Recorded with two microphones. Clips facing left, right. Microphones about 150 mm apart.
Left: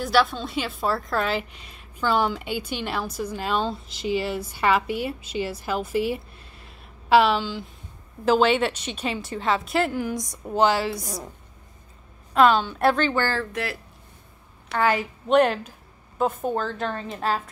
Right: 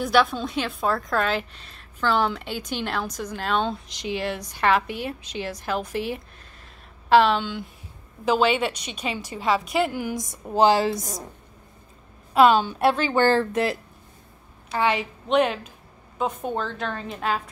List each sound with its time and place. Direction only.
0.0 s a woman's voice: centre (ahead or behind)
10.6 s a woman's voice: 40° right (ahead or behind)
12.4 s a woman's voice: 10° right (ahead or behind)
13.1 s speech: 25° right (ahead or behind)
14.8 s a woman's voice: centre (ahead or behind)
16.2 s a woman's voice: 5° left (ahead or behind)